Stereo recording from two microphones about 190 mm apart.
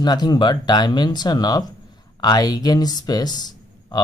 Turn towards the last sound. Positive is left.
turn(degrees=20)  # may be behind; listen again after turning